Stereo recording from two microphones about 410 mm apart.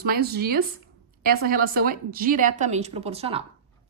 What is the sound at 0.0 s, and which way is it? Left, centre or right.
A woman's voice, right.